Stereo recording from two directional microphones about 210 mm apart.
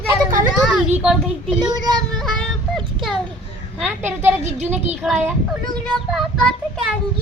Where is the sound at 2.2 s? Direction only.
Centre (ahead or behind).